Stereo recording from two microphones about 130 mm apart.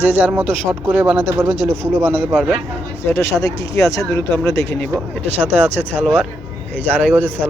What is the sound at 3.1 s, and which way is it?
Speech, 20° left (ahead or behind).